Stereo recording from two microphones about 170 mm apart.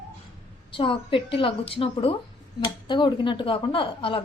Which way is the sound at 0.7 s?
30° left (ahead or behind).